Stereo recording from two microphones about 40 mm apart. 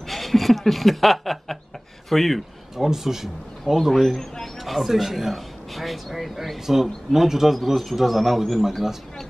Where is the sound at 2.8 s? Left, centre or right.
Centre.